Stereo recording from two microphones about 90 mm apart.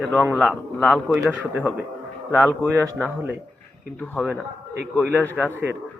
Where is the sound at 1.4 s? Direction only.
20° right (ahead or behind).